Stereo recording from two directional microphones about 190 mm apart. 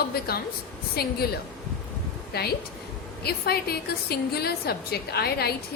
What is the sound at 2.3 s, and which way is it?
A woman's voice, 55° left (ahead or behind).